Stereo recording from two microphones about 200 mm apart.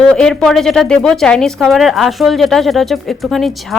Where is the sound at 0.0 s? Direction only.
5° left (ahead or behind).